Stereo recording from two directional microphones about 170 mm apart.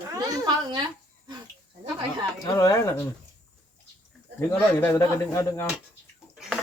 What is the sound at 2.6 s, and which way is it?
Speech, 15° left (ahead or behind).